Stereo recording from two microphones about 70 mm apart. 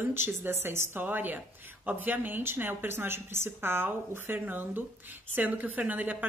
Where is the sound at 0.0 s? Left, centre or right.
Right.